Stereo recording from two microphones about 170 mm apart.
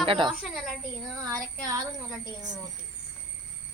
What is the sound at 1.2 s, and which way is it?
Speech, 20° right (ahead or behind).